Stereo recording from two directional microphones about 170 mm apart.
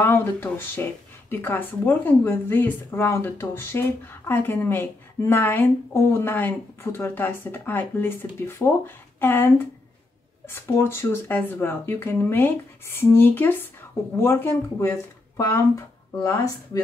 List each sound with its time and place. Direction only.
0.0 s a woman's voice: 10° left (ahead or behind)
10.5 s a woman's voice: 15° left (ahead or behind)